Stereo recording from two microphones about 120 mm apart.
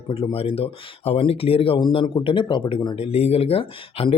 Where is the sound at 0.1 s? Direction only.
55° left (ahead or behind).